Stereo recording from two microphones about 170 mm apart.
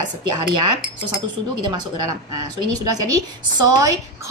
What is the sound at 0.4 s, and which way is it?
A woman's voice, 25° right (ahead or behind).